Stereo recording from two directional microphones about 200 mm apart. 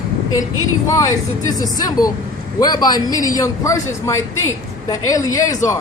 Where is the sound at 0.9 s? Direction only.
15° left (ahead or behind).